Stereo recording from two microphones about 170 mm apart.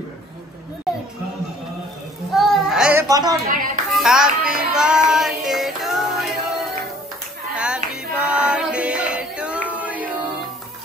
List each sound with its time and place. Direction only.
2.3 s a sound: centre (ahead or behind); by 3.3 s 20° right (ahead or behind)
3.5 s a child's voice: 55° right (ahead or behind)
3.9 s music: 5° right (ahead or behind)